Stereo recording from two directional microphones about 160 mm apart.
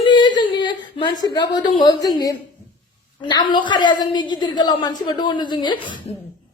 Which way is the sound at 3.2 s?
30° left (ahead or behind).